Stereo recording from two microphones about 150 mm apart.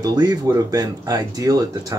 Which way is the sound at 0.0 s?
25° right (ahead or behind).